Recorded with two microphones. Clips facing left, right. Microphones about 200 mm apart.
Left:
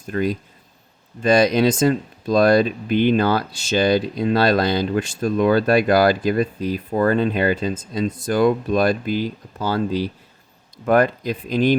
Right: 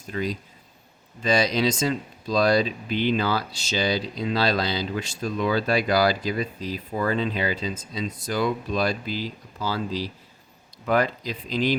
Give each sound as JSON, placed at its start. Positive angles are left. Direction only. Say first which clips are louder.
{"t": 0.1, "sound": "speech", "louder": "left 6 dB", "side_deg": 55}